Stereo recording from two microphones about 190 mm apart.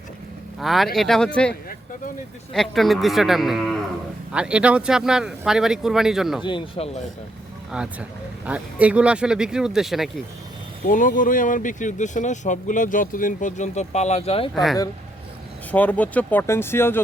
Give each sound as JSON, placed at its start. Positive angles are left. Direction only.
{"t": 0.6, "sound": "speech", "side_deg": 0}
{"t": 6.4, "sound": "speech", "side_deg": 30}
{"t": 7.7, "sound": "speech", "side_deg": -5}
{"t": 10.8, "sound": "speech", "side_deg": 45}
{"t": 14.5, "sound": "speech", "side_deg": 0}